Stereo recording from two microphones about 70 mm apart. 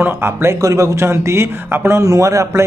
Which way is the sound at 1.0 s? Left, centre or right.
Right.